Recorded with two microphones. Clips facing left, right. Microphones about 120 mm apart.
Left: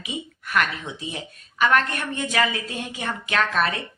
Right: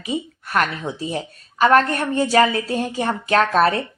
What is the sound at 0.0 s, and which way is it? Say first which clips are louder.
A woman's voice: right 7 dB; 35° right (ahead or behind).